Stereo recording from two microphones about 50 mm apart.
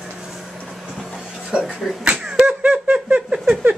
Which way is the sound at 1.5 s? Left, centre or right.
Right.